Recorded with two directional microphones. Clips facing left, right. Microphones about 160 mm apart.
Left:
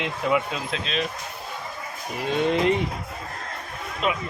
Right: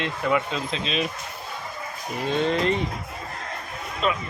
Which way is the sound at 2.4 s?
15° left (ahead or behind).